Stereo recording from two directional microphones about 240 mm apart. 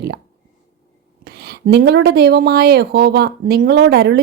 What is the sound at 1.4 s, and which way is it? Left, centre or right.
Speech, right.